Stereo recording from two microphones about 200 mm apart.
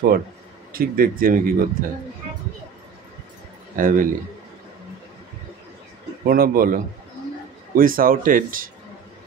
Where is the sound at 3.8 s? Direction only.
45° right (ahead or behind).